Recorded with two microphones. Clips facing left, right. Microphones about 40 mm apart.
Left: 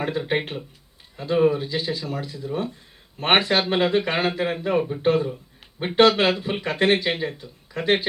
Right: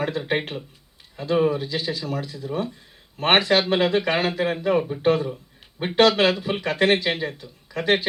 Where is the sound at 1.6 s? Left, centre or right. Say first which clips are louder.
Even; left.